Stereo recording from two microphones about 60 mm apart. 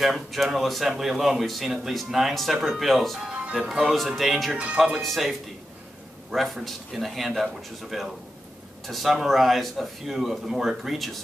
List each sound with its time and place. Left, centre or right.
0.0 s speech: centre
3.3 s music: right
3.5 s speech: centre
4.7 s speech: centre
5.0 s speech: centre
6.3 s speech: centre